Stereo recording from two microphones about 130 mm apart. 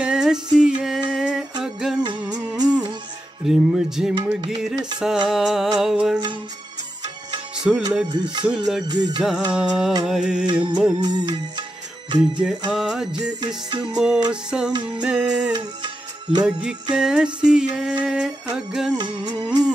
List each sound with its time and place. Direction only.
0.0 s a sound: 5° right (ahead or behind)
1.6 s music: 5° right (ahead or behind)
7.6 s music: 5° right (ahead or behind)
8.1 s music: 40° right (ahead or behind)
8.5 s music: 5° right (ahead or behind)
8.8 s music: 35° right (ahead or behind)
9.2 s music: 5° right (ahead or behind)
10.5 s music: 40° right (ahead or behind)
12.2 s music: 10° right (ahead or behind)
13.7 s music: 40° right (ahead or behind)
13.9 s music: 5° right (ahead or behind)
15.5 s music: 35° right (ahead or behind)
16.9 s music: 5° right (ahead or behind)
18.9 s music: 35° right (ahead or behind)